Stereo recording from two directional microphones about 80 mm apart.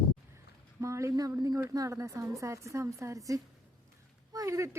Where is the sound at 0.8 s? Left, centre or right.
Right.